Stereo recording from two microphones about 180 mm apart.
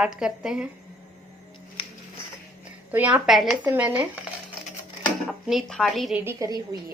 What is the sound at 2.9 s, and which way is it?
Speech, 10° right (ahead or behind).